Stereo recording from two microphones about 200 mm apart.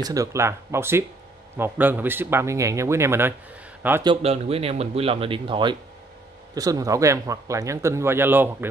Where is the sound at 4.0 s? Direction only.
25° right (ahead or behind); by 8.4 s 10° right (ahead or behind).